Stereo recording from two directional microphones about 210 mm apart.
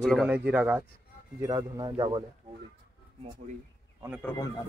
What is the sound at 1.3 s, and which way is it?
Speech, 15° right (ahead or behind).